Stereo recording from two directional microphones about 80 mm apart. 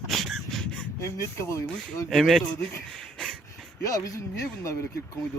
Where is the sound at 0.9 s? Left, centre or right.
Left.